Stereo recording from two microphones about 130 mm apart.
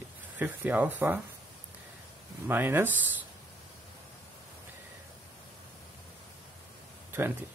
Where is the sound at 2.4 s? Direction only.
15° right (ahead or behind).